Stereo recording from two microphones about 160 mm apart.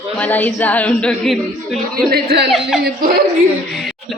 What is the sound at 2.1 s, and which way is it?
Speech, 75° right (ahead or behind).